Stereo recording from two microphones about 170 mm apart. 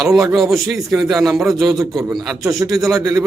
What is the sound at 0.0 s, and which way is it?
Speech, centre (ahead or behind).